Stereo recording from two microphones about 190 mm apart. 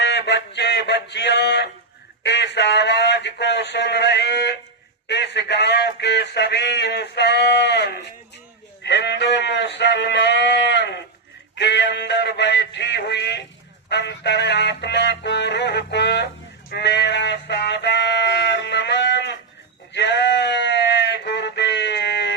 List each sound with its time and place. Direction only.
0.0 s mantra: 65° left (ahead or behind)
2.2 s a man's voice: 65° left (ahead or behind)
8.8 s sheep: 65° left (ahead or behind)
11.5 s synthetic singing: 65° left (ahead or behind)
13.9 s music: 65° left (ahead or behind)
16.6 s a sound: 60° left (ahead or behind)
19.9 s sheep: 65° left (ahead or behind)